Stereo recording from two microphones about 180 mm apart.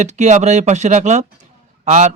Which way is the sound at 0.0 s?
40° right (ahead or behind).